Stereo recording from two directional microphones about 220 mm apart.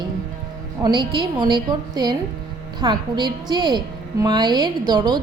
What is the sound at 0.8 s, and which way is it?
A woman's voice, 20° right (ahead or behind).